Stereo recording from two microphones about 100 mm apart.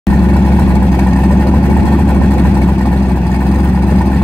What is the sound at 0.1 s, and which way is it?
Vehicle, 15° left (ahead or behind).